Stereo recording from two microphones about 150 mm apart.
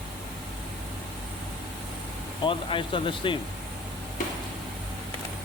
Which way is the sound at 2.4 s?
35° left (ahead or behind).